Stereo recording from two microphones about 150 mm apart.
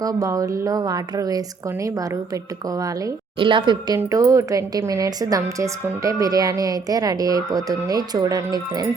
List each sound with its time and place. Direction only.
0.0 s speech: 25° right (ahead or behind)
3.3 s speech: 35° right (ahead or behind)